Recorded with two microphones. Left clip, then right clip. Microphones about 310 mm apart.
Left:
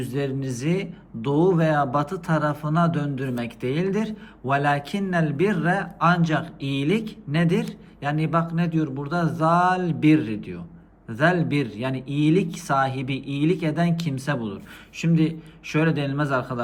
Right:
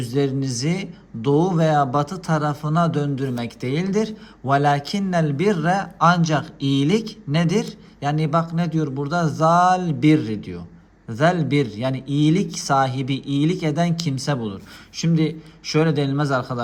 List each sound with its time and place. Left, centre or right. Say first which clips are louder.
0.0 s speech: right 5 dB; centre